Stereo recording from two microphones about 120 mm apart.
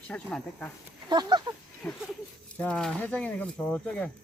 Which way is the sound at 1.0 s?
35° right (ahead or behind).